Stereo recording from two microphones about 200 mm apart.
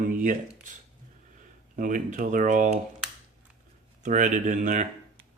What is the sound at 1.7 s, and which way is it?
Speech, 40° right (ahead or behind).